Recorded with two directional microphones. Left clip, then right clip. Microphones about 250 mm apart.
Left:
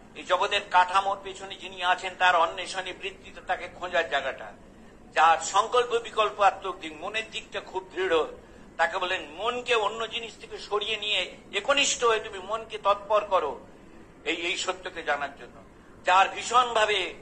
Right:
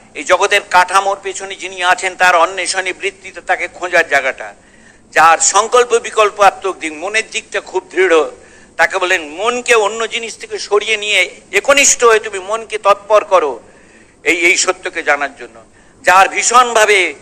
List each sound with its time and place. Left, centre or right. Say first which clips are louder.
0.1 s a man's voice: right 14 dB; right